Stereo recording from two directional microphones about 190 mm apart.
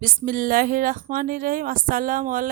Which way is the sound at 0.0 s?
50° right (ahead or behind).